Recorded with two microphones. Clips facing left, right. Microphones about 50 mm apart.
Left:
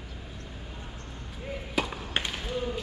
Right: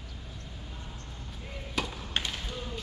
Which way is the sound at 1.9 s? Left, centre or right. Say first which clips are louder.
Left 2 dB; left.